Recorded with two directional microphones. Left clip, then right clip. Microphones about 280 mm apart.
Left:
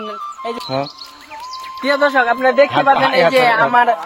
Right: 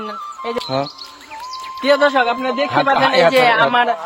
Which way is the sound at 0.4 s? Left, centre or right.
Centre.